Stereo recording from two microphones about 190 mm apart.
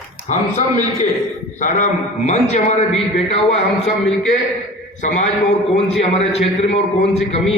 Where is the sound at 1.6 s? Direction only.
40° left (ahead or behind).